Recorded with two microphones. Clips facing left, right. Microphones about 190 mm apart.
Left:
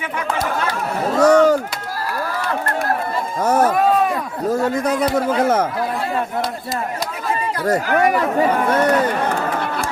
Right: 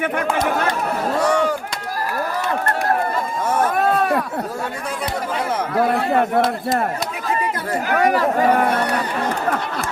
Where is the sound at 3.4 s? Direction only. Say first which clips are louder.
Left 4 dB; 40° left (ahead or behind).